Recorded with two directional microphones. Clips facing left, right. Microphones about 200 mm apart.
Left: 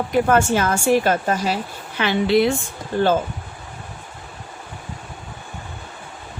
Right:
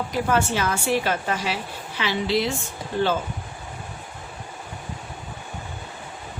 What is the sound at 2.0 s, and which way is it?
Speech, 55° left (ahead or behind).